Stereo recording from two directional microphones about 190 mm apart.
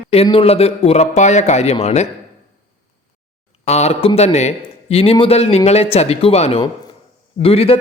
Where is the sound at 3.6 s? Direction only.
35° left (ahead or behind).